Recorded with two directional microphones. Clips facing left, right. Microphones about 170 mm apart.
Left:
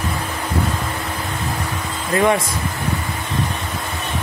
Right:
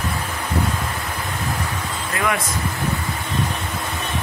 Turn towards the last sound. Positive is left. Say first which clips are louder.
# left 7 dB
turn(degrees=25)  # may be behind; listen again after turning